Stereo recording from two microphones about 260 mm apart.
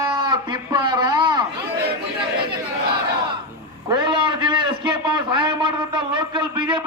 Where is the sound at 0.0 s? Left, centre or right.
Centre.